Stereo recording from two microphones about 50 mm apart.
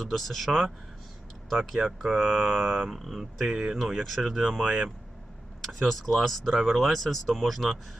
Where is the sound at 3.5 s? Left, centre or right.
Centre.